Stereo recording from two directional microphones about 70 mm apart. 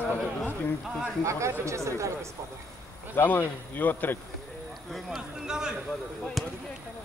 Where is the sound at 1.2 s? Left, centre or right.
Right.